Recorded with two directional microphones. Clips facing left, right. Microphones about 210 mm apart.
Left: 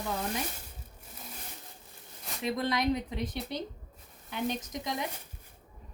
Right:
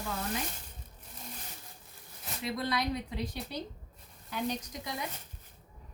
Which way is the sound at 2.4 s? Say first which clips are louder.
Left 4 dB; 20° left (ahead or behind).